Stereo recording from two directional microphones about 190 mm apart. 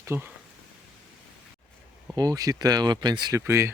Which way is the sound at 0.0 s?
10° right (ahead or behind).